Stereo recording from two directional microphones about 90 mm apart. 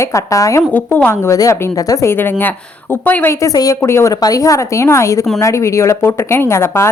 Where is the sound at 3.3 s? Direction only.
40° left (ahead or behind).